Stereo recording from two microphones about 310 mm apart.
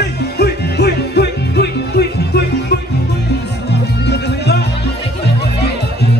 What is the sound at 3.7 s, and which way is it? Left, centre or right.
Music, left.